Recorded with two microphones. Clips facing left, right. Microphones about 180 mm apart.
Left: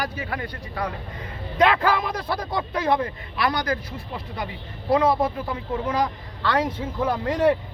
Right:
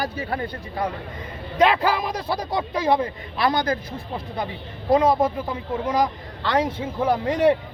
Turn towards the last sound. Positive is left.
turn(degrees=-20)  # may be behind; listen again after turning